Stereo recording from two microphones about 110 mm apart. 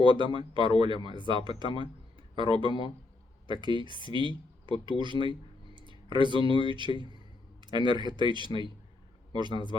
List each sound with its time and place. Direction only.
0.0 s speech: 45° right (ahead or behind)
5.7 s a sound: 45° right (ahead or behind)
6.7 s a man's voice: 45° right (ahead or behind)